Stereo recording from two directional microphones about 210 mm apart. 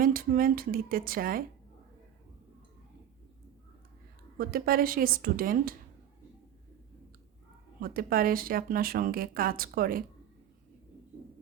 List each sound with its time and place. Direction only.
0.0 s speech: 40° right (ahead or behind)
4.4 s speech: 45° right (ahead or behind)
7.8 s speech: 45° right (ahead or behind)